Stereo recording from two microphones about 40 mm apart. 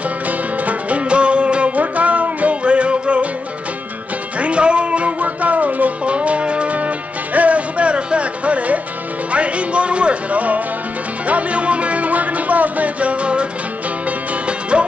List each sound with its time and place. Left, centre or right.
0.7 s music: right
4.4 s music: right
6.0 s music: right